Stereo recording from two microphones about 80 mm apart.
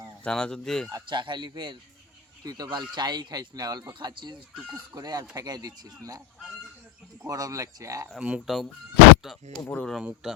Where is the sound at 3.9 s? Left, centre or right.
Right.